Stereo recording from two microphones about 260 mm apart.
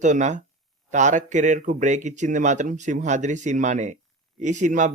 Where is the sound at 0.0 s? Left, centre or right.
Right.